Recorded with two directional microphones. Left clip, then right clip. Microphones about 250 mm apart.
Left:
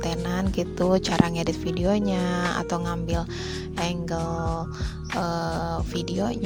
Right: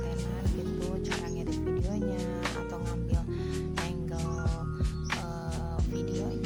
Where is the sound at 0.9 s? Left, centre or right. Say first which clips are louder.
Left 12 dB; left.